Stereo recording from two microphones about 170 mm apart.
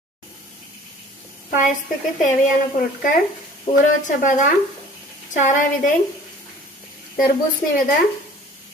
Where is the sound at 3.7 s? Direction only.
40° left (ahead or behind).